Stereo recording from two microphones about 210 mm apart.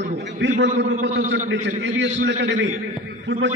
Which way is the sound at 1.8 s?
60° right (ahead or behind).